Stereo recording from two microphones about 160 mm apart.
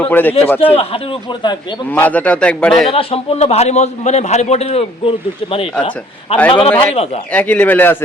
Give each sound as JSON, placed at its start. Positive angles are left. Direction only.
{"t": 0.0, "sound": "a man's voice", "side_deg": 10}
{"t": 0.7, "sound": "a man's voice", "side_deg": 35}
{"t": 1.9, "sound": "a man's voice", "side_deg": 10}
{"t": 2.9, "sound": "a man's voice", "side_deg": 35}
{"t": 7.3, "sound": "a man's voice", "side_deg": 10}